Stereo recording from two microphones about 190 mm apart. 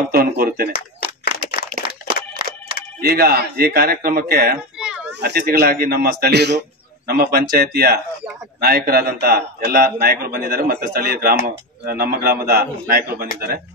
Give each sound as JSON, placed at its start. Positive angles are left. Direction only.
{"t": 0.1, "sound": "a man's voice", "side_deg": -55}
{"t": 0.7, "sound": "a sound", "side_deg": 50}
{"t": 3.0, "sound": "a man's voice", "side_deg": -55}
{"t": 4.7, "sound": "children playing", "side_deg": -5}
{"t": 5.2, "sound": "a man's voice", "side_deg": -55}